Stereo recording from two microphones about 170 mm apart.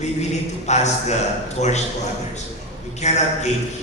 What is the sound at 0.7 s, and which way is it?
A man's voice, 40° left (ahead or behind).